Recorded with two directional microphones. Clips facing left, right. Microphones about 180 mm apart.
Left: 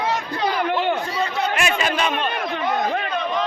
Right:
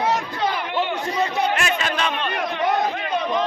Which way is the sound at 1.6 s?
10° left (ahead or behind).